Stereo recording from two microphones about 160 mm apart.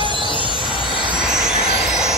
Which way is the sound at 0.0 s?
30° left (ahead or behind).